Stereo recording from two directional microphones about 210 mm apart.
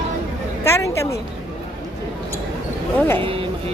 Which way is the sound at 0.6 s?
15° left (ahead or behind).